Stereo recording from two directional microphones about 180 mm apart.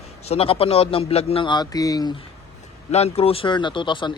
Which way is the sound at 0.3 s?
30° left (ahead or behind).